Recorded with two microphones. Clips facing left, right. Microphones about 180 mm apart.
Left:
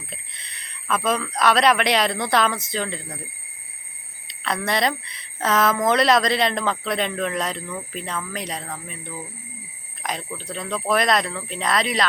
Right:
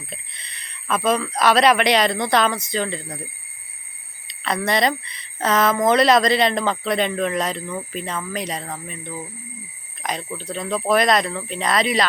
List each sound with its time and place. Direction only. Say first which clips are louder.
0.1 s a woman's voice: right 3 dB; centre (ahead or behind)
4.3 s a woman's voice: right 3 dB; centre (ahead or behind)